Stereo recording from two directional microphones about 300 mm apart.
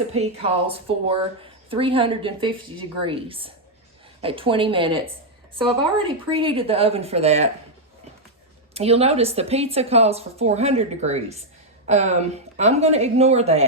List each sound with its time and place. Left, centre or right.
0.1 s speech: centre
6.0 s speech: centre
8.7 s speech: centre